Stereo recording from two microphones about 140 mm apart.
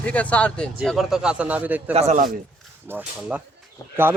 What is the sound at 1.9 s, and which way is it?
Speech, 55° right (ahead or behind).